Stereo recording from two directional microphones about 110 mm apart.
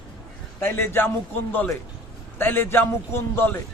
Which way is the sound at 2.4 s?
20° left (ahead or behind).